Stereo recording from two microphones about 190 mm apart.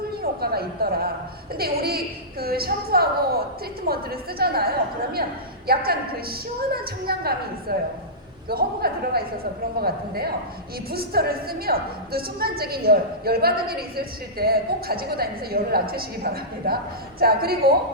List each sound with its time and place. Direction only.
0.2 s a woman's voice: 55° right (ahead or behind)